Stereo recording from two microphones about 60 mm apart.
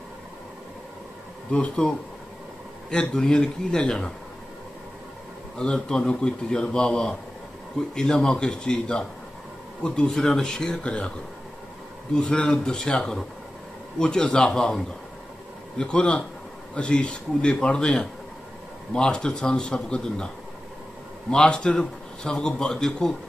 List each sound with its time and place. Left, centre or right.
1.5 s a man's voice: centre
5.6 s a man's voice: centre
12.1 s a man's voice: centre
15.8 s a man's voice: centre
21.3 s a man's voice: centre